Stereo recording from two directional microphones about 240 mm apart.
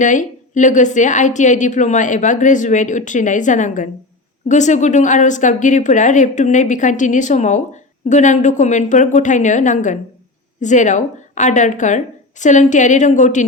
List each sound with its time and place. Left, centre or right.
0.0 s a woman's voice: left